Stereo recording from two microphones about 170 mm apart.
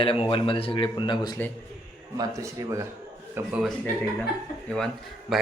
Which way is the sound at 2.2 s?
15° right (ahead or behind).